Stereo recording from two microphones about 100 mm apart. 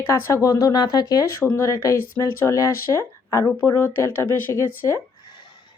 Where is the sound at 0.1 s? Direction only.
30° left (ahead or behind).